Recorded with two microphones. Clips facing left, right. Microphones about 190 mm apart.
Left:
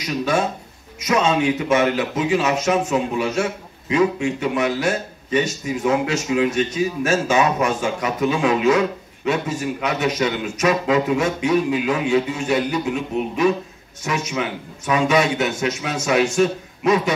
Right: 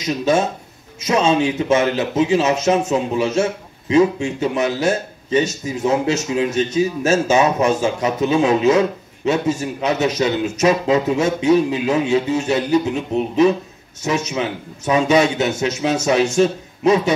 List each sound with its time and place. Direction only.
0.0 s a man's voice: 25° right (ahead or behind)
14.0 s a man's voice: 25° right (ahead or behind)